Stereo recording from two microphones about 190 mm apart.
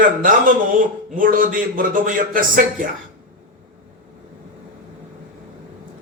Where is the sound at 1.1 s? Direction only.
45° right (ahead or behind).